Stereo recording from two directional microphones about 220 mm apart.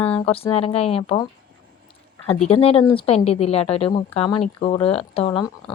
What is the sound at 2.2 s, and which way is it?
Speech, 30° left (ahead or behind).